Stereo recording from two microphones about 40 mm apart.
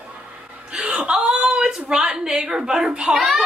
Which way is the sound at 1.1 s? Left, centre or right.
Right.